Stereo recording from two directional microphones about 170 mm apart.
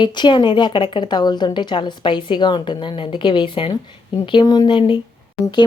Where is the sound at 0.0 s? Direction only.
25° left (ahead or behind).